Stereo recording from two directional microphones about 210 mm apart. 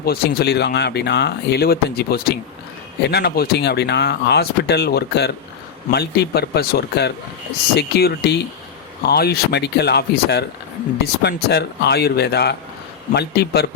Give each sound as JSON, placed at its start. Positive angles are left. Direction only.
{"t": 0.0, "sound": "speech", "side_deg": 50}